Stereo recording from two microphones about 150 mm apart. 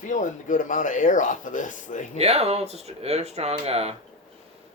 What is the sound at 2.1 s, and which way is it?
Speech, 45° right (ahead or behind).